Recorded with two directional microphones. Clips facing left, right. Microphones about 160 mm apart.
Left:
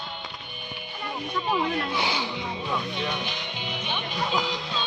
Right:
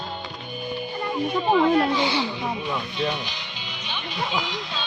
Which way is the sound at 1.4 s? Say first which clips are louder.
Right 6 dB; 30° right (ahead or behind).